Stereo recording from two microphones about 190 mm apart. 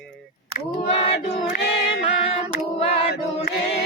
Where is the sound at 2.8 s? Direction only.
30° left (ahead or behind).